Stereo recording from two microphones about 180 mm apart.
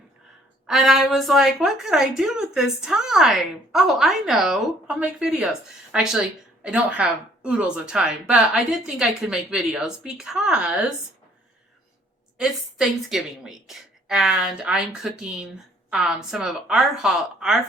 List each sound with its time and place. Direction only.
0.7 s a woman's voice: centre (ahead or behind)
12.4 s a woman's voice: centre (ahead or behind)